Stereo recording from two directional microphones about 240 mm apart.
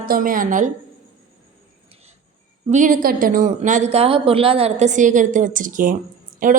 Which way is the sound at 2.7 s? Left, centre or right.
Right.